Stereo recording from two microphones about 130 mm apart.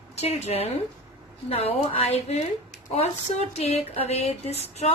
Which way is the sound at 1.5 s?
50° left (ahead or behind).